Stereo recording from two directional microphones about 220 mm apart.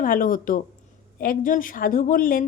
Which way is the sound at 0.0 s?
40° left (ahead or behind).